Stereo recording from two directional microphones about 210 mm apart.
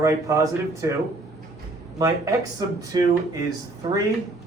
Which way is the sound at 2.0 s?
15° right (ahead or behind).